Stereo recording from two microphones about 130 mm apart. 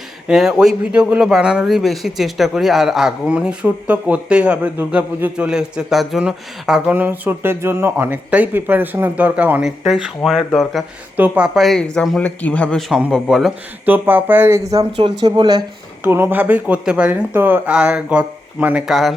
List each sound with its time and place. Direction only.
0.3 s a man's voice: 5° right (ahead or behind)
12.9 s a man's voice: centre (ahead or behind)
13.8 s speech: 15° right (ahead or behind)
14.9 s speech: 40° right (ahead or behind)
16.0 s speech: 15° right (ahead or behind)